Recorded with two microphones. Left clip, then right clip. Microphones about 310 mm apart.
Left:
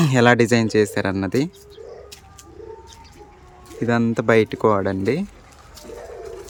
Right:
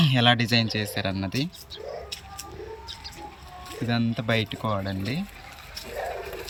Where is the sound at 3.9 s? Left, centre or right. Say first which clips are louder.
Left 9 dB; centre.